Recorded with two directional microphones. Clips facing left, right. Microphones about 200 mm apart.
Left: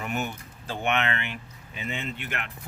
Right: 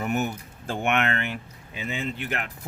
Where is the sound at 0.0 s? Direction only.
45° right (ahead or behind).